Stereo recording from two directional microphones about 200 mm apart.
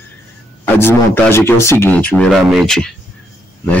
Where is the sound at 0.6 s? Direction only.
10° left (ahead or behind).